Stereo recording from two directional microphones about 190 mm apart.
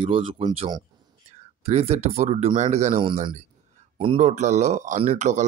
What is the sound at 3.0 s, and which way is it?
Speech, 25° right (ahead or behind).